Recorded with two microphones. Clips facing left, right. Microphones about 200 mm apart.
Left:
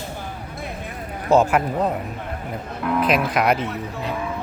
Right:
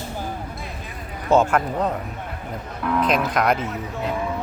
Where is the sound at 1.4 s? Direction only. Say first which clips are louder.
Left 1 dB; 10° left (ahead or behind).